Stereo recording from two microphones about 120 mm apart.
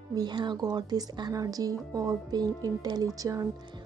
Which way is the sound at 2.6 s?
30° right (ahead or behind).